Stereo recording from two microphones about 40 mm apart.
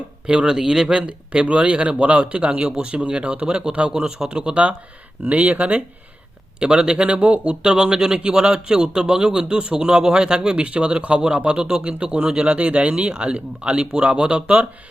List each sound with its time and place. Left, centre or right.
0.3 s a man's voice: right
0.5 s speech: centre
0.9 s a man's voice: right
4.3 s a man's voice: right
6.6 s a man's voice: right
7.6 s a man's voice: right